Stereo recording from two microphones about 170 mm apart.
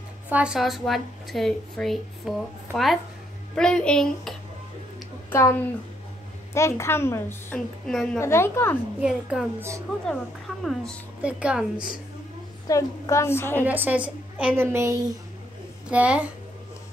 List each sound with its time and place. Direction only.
0.3 s speech: 5° right (ahead or behind)
5.3 s a woman's voice: 15° left (ahead or behind)
8.2 s a woman's voice: 15° left (ahead or behind)
9.0 s speech: 5° right (ahead or behind)
12.6 s a woman's voice: 20° left (ahead or behind)
13.7 s a woman's voice: 10° right (ahead or behind)